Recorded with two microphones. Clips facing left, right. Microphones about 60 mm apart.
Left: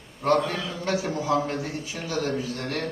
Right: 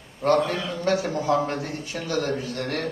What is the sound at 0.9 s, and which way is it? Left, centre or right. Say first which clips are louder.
A man's voice: right 3 dB; right.